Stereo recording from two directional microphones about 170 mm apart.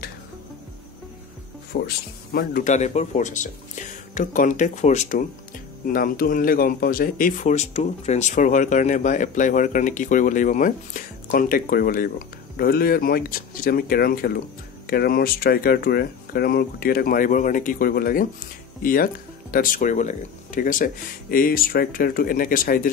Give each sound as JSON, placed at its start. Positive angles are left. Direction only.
{"t": 1.7, "sound": "speech", "side_deg": 70}
{"t": 2.3, "sound": "speech", "side_deg": 50}
{"t": 5.9, "sound": "speech", "side_deg": 55}